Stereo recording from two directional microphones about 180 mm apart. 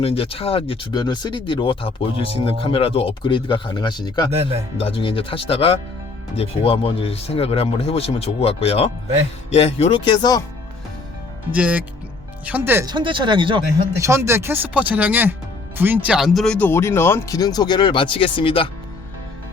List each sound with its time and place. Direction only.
0.0 s speech: 35° left (ahead or behind)
4.3 s speech: 35° right (ahead or behind)
4.8 s speech: 30° left (ahead or behind)
11.5 s speech: 10° right (ahead or behind)
12.9 s speech: 25° right (ahead or behind)
14.0 s speech: 15° right (ahead or behind); by 18.7 s 30° left (ahead or behind)